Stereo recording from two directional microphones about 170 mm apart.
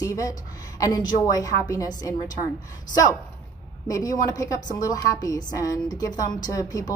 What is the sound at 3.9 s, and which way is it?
A woman's voice, 20° left (ahead or behind).